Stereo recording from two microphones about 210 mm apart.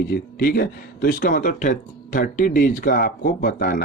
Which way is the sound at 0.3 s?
45° left (ahead or behind).